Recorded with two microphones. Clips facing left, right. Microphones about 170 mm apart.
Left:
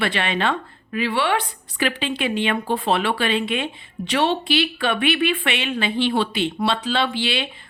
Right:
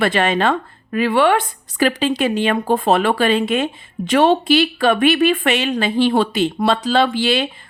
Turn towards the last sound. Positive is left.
turn(degrees=-45)  # may be behind; listen again after turning